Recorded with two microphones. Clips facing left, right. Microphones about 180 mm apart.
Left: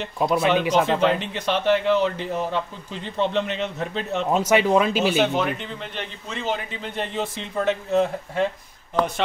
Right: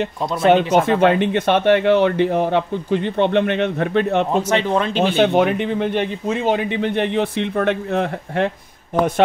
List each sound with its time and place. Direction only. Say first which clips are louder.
0.4 s speech: right 8 dB; 55° right (ahead or behind)
4.5 s speech: even; 10° left (ahead or behind)
5.1 s speech: right 6 dB; 60° right (ahead or behind)